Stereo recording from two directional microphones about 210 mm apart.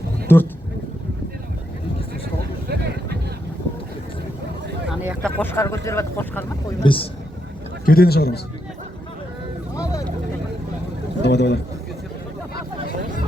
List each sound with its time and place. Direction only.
0.3 s speech: 10° left (ahead or behind)
2.4 s vehicle: 50° right (ahead or behind)
4.9 s a sound: 5° right (ahead or behind)
5.4 s speech: 10° left (ahead or behind)
6.8 s a man's voice: 25° left (ahead or behind)
7.9 s a man's voice: 45° left (ahead or behind)
9.7 s vehicle: 15° left (ahead or behind)
11.2 s a man's voice: 55° left (ahead or behind)